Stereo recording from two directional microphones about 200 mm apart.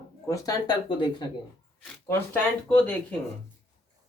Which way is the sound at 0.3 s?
20° left (ahead or behind).